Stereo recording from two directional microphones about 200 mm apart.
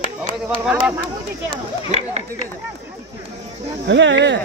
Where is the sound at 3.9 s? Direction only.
65° right (ahead or behind).